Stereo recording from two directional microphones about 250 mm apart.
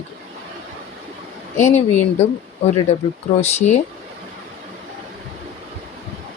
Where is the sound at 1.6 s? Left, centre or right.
Left.